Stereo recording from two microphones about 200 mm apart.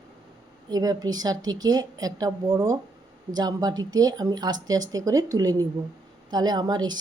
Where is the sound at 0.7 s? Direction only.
20° right (ahead or behind).